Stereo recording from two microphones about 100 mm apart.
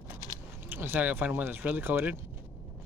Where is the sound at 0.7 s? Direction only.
20° right (ahead or behind).